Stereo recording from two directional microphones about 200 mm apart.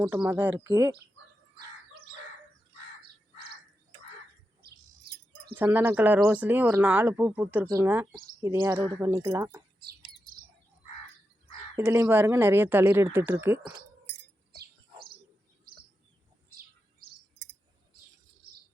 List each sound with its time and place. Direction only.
0.3 s speech: 10° right (ahead or behind)
3.3 s bird: 50° right (ahead or behind)
4.6 s bird: 50° right (ahead or behind)
5.5 s speech: 10° right (ahead or behind)
9.8 s bird: 50° right (ahead or behind)
11.8 s speech: 10° right (ahead or behind)
14.5 s chirp: 50° right (ahead or behind)
15.7 s bird: 50° right (ahead or behind)